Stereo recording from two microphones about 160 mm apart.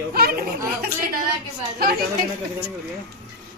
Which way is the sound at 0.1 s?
70° right (ahead or behind).